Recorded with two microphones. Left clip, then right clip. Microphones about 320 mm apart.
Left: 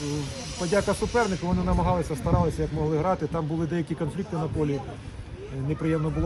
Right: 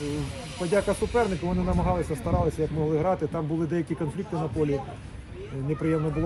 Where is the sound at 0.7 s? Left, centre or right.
Centre.